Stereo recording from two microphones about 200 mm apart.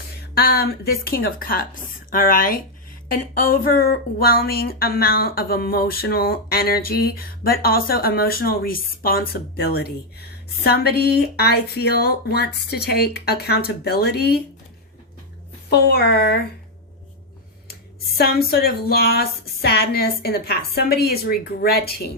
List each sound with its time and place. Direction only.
0.3 s a woman's voice: 50° left (ahead or behind)
15.7 s a woman's voice: 55° left (ahead or behind)
18.2 s a woman's voice: 50° left (ahead or behind)